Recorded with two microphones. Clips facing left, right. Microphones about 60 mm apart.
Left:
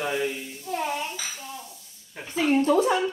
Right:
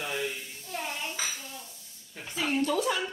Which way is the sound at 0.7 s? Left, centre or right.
Centre.